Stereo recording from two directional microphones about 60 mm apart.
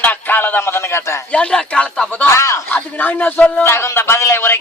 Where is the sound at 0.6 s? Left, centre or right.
Left.